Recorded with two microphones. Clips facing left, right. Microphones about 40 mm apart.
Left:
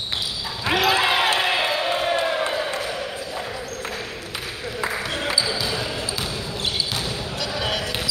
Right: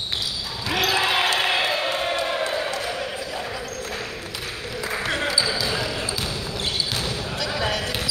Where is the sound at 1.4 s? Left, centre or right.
Centre.